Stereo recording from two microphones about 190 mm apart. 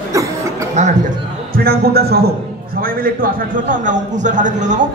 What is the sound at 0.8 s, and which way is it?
A man's voice, 40° right (ahead or behind).